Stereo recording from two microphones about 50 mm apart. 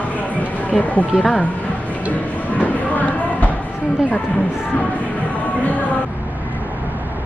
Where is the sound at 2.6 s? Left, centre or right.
Left.